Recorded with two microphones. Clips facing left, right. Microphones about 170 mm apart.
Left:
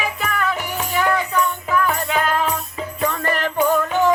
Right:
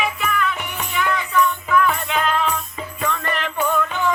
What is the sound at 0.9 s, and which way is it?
Music, 40° left (ahead or behind).